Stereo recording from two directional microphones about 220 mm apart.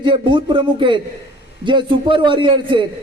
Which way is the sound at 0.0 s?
20° right (ahead or behind).